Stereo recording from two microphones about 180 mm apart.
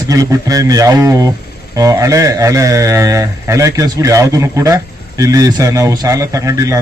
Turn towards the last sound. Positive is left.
turn(degrees=-15)  # may be behind; listen again after turning